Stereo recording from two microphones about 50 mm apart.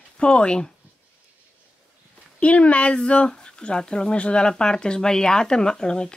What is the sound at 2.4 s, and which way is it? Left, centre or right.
Speech, left.